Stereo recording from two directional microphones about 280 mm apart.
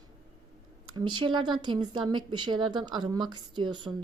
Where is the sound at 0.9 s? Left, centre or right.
Centre.